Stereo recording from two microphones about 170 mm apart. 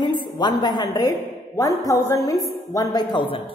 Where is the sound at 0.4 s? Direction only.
25° left (ahead or behind).